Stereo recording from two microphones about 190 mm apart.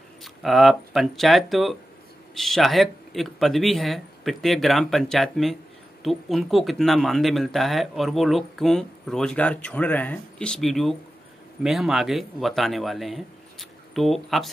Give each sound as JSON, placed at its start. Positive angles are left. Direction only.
{"t": 0.2, "sound": "speech", "side_deg": 0}